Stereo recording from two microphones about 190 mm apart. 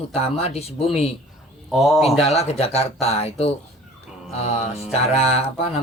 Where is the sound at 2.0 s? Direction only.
30° left (ahead or behind).